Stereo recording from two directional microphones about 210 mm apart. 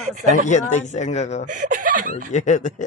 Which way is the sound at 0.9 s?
35° left (ahead or behind).